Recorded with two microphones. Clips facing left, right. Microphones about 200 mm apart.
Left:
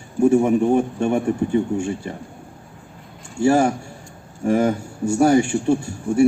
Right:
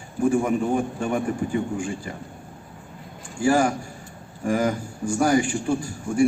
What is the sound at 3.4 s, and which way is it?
A man's voice, 25° left (ahead or behind).